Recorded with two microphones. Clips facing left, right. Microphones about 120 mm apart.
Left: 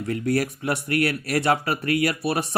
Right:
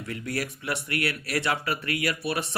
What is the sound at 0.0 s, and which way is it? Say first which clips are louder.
Speech: left 8 dB; 40° left (ahead or behind).